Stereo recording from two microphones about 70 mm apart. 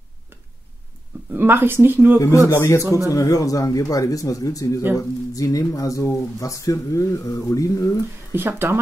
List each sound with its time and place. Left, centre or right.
1.3 s speech: right
2.1 s speech: left
3.1 s speech: left
8.3 s speech: right